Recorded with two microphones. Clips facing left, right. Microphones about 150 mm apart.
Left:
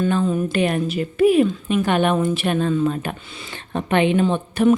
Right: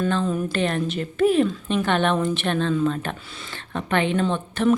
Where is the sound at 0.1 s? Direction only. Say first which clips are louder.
Left 3 dB; 10° left (ahead or behind).